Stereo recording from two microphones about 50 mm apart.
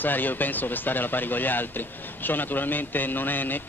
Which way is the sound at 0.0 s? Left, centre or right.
Left.